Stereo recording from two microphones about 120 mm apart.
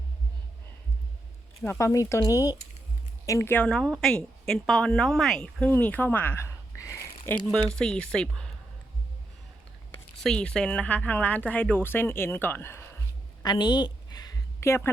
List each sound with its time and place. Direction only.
1.8 s a woman's voice: 25° left (ahead or behind)
7.7 s speech: 5° left (ahead or behind)
10.2 s speech: 5° left (ahead or behind)
13.4 s a sound: 35° left (ahead or behind)
14.6 s speech: 20° left (ahead or behind)